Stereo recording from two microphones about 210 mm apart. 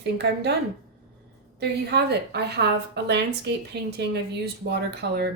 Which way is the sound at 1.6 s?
50° right (ahead or behind).